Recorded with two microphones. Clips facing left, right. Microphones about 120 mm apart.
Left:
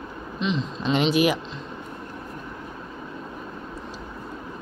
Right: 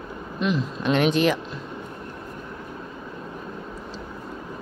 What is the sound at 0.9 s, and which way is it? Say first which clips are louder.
Speech: even; 10° left (ahead or behind).